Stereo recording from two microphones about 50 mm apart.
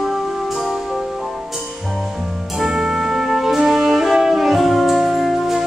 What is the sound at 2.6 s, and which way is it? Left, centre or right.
Music, centre.